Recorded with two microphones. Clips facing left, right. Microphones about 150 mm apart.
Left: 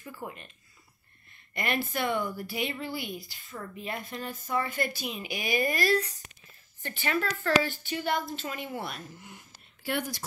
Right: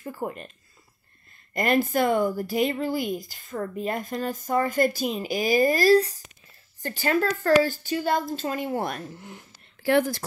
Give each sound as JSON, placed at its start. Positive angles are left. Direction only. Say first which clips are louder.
{"t": 0.0, "sound": "a sound", "louder": "right 8 dB", "side_deg": -45}
{"t": 1.5, "sound": "a woman's voice", "louder": "right 9 dB", "side_deg": -40}
{"t": 9.8, "sound": "speech", "louder": "right 11 dB", "side_deg": -90}